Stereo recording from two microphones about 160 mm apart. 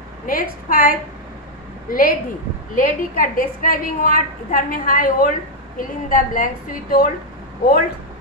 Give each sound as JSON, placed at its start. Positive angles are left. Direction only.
{"t": 0.3, "sound": "a woman's voice", "side_deg": 60}